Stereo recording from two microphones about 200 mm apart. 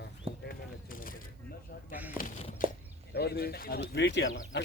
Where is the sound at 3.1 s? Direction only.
55° left (ahead or behind).